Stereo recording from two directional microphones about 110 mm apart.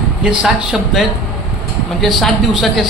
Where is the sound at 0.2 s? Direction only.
10° right (ahead or behind).